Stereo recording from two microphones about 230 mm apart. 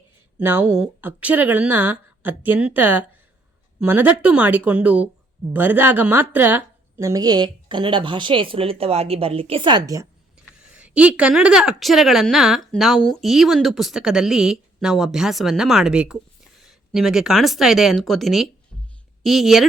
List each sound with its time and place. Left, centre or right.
0.3 s speech: centre